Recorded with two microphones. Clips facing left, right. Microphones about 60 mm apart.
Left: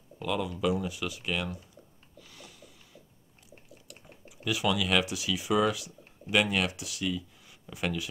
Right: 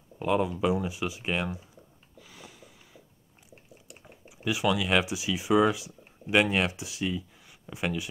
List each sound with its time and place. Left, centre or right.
0.2 s speech: right
2.1 s snort: centre
3.9 s typing: centre
5.0 s speech: centre
6.5 s speech: right